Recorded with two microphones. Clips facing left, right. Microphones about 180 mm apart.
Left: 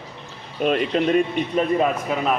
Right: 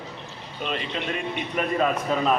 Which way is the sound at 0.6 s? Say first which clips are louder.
Left 10 dB; 50° left (ahead or behind).